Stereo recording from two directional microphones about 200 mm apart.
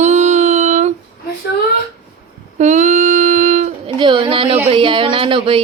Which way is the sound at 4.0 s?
25° right (ahead or behind).